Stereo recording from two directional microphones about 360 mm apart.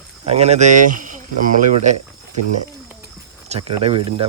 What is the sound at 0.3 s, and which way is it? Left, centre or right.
Speech, centre.